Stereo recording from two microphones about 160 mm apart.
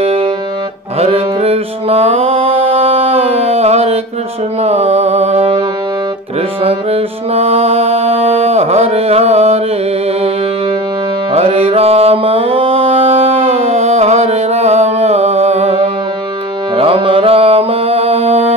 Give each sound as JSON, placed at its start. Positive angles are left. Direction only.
{"t": 0.0, "sound": "music", "side_deg": -35}
{"t": 6.6, "sound": "music", "side_deg": -40}
{"t": 11.3, "sound": "music", "side_deg": -40}